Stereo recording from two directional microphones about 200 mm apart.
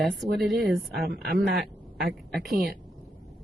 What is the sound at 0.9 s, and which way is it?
Speech, 50° right (ahead or behind).